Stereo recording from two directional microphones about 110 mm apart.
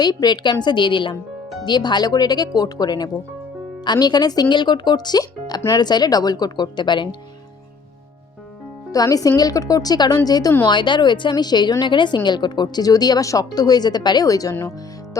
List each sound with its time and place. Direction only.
0.0 s a woman's voice: 40° left (ahead or behind)
8.9 s a woman's voice: 35° left (ahead or behind)